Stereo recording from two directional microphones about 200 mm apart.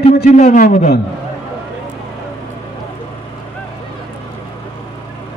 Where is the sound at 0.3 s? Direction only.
35° left (ahead or behind).